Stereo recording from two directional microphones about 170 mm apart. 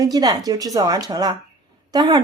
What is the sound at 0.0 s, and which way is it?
A woman's voice, 20° right (ahead or behind).